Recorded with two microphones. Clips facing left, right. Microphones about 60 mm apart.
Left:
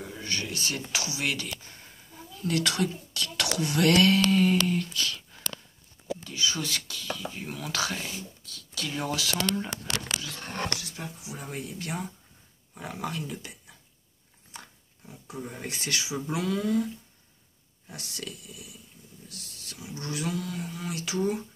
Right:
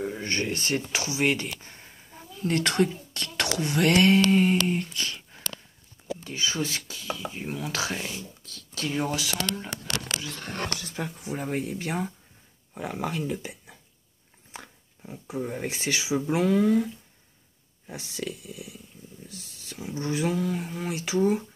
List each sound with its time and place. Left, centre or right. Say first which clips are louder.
0.0 s speech: right 6 dB; right
2.5 s speech: right 3 dB; right
8.4 s a sound: right 2 dB; right
8.9 s speech: right 2 dB; right
11.0 s speech: right 7 dB; right
11.4 s speech: right 6 dB; right